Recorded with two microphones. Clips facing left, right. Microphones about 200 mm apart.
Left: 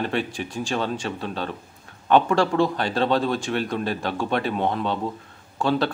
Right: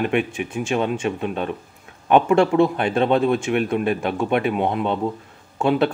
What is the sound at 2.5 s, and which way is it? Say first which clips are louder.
Speech: right 4 dB; 15° right (ahead or behind).